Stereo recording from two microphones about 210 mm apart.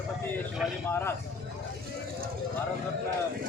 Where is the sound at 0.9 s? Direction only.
10° left (ahead or behind).